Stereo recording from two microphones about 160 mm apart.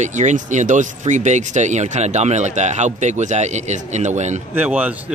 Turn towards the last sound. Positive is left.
turn(degrees=-10)  # may be behind; listen again after turning